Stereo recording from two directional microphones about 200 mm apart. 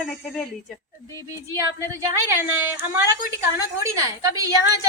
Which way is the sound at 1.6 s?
15° right (ahead or behind).